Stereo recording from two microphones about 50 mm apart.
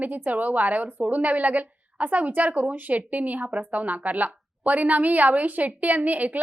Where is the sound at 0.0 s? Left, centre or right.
Right.